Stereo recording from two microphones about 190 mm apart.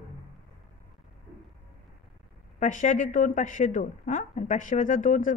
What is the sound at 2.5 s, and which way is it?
Speech, 40° left (ahead or behind).